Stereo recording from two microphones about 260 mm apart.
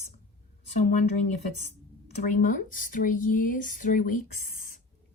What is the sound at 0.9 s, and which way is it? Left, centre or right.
Speech, left.